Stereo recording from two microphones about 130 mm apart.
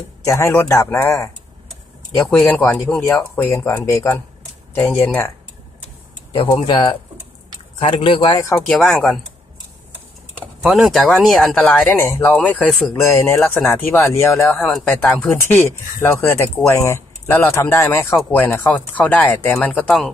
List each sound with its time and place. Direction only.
0.2 s speech: 20° left (ahead or behind)
2.1 s speech: 10° left (ahead or behind)
6.5 s speech: 35° left (ahead or behind)
8.3 s speech: 25° left (ahead or behind)
8.6 s speech: 5° left (ahead or behind)
10.6 s speech: centre (ahead or behind)
12.9 s speech: 20° left (ahead or behind)
14.5 s speech: 5° left (ahead or behind)